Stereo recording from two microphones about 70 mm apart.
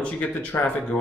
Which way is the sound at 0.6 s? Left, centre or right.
Centre.